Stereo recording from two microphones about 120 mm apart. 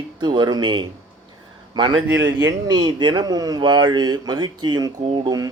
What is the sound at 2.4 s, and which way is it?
Speech, 30° right (ahead or behind).